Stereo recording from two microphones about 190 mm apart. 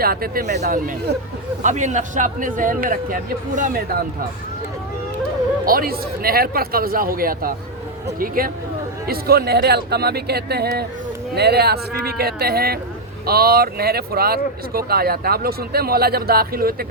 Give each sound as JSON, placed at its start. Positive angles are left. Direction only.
{"t": 0.0, "sound": "a man's voice", "side_deg": -50}
{"t": 5.6, "sound": "speech", "side_deg": -50}